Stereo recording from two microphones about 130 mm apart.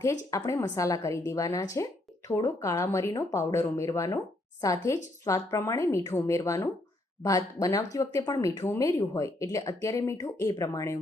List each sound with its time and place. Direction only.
0.0 s speech: 25° left (ahead or behind)